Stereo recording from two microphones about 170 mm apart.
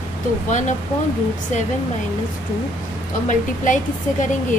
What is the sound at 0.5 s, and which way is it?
Speech, 45° left (ahead or behind).